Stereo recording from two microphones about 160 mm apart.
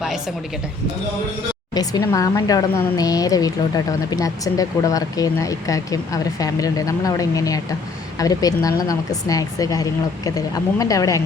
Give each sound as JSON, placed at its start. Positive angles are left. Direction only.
{"t": 1.7, "sound": "speech", "side_deg": 25}